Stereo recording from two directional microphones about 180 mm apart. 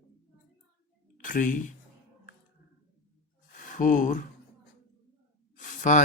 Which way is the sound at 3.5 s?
50° left (ahead or behind).